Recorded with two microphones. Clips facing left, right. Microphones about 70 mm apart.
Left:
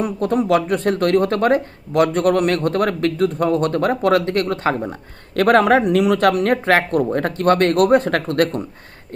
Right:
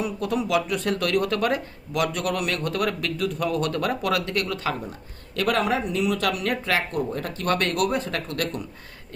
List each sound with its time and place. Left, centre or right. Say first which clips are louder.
0.0 s speech: left 7 dB; left
4.8 s speech: left 9 dB; left
6.1 s speech: left 9 dB; left